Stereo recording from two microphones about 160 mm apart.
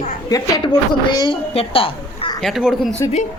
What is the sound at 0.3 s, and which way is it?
A woman's voice, 25° left (ahead or behind).